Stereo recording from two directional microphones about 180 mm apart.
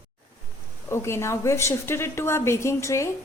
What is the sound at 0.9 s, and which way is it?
A woman's voice, 15° left (ahead or behind).